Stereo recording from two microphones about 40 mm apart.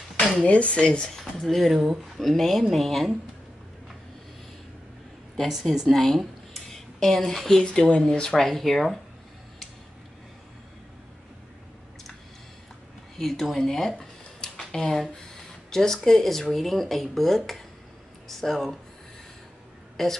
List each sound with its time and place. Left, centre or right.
0.4 s speech: left
1.1 s speech: centre
5.5 s speech: centre
8.2 s speech: centre
8.5 s speech: centre
13.2 s speech: centre
18.4 s speech: centre
20.0 s speech: centre